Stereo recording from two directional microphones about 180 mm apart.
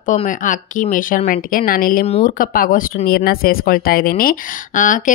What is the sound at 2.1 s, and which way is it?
Speech, 35° left (ahead or behind).